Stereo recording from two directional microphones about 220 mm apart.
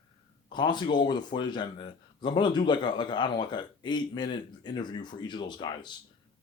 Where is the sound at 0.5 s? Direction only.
20° left (ahead or behind).